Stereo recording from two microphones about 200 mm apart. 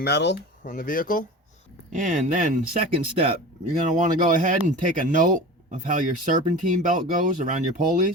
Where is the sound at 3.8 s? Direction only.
40° right (ahead or behind).